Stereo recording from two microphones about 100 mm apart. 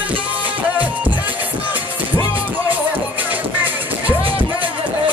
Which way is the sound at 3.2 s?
15° right (ahead or behind).